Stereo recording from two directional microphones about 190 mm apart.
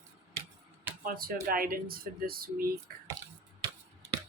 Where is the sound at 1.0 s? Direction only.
50° right (ahead or behind).